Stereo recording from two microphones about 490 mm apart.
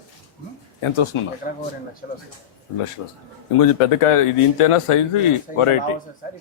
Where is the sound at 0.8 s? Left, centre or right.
Left.